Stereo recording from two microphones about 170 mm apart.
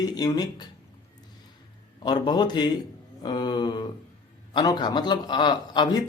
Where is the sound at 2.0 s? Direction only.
25° left (ahead or behind).